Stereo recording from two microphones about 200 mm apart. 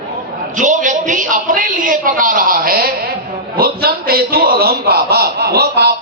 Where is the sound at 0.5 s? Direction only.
40° right (ahead or behind).